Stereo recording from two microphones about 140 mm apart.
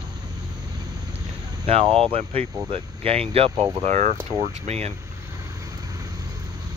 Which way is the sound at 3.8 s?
55° right (ahead or behind).